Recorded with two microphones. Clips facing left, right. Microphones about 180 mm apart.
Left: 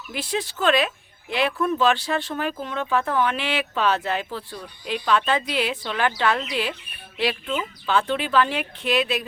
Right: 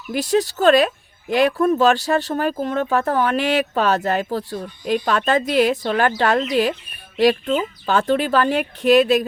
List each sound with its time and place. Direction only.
0.1 s speech: 40° right (ahead or behind)